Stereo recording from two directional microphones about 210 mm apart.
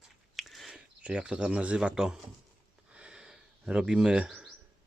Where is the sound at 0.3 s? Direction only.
Centre (ahead or behind).